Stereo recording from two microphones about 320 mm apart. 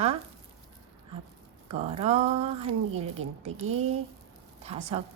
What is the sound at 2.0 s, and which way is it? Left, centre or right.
A woman's voice, centre.